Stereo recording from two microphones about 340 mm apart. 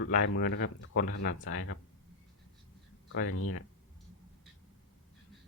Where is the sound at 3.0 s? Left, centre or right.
Left.